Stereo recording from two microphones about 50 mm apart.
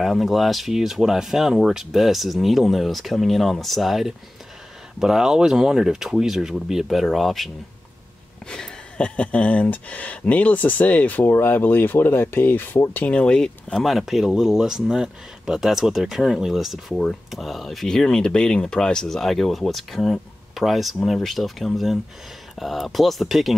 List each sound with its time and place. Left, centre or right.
0.0 s speech: centre
8.5 s speech: centre; by 13.0 s left
13.0 s speech: left
13.7 s speech: centre
17.8 s speech: centre